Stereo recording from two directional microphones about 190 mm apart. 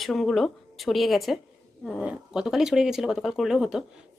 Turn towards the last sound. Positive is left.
turn(degrees=-5)  # may be behind; listen again after turning